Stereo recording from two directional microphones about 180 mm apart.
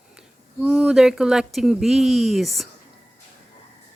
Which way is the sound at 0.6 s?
5° right (ahead or behind).